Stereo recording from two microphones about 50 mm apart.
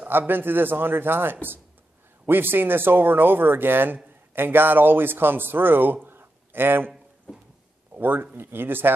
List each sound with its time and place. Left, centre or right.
0.3 s speech: right
6.0 s a sound: right
7.9 s speech: right